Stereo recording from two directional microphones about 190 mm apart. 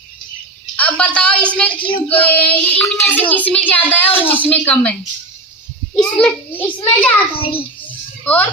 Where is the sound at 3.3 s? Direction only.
10° left (ahead or behind).